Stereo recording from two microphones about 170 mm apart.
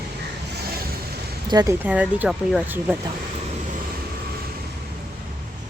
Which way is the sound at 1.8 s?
10° right (ahead or behind).